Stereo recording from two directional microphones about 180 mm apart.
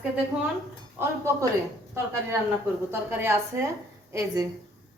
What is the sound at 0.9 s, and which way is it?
Speech, 15° right (ahead or behind).